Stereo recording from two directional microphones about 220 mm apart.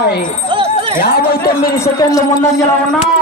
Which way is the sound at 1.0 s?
45° left (ahead or behind).